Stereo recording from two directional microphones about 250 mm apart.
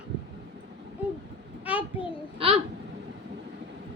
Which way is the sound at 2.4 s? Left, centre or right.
Right.